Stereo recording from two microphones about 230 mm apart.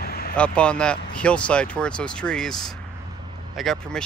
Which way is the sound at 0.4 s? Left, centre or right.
Centre.